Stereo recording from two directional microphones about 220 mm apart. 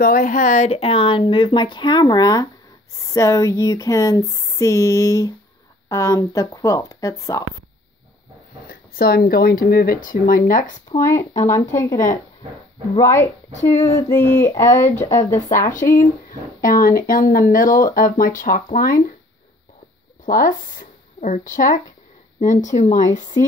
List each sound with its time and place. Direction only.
0.0 s speech: 40° left (ahead or behind); by 7.4 s 15° left (ahead or behind)
8.6 s speech: 45° left (ahead or behind)
10.9 s speech: 10° left (ahead or behind)
13.6 s speech: 30° left (ahead or behind)
13.9 s speech: 15° left (ahead or behind)
15.6 s speech: 35° left (ahead or behind)
20.2 s speech: 40° left (ahead or behind)